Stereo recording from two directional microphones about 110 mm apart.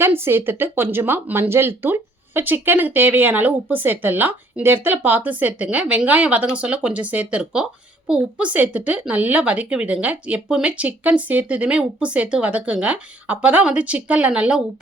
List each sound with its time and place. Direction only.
0.0 s a child's voice: 20° right (ahead or behind)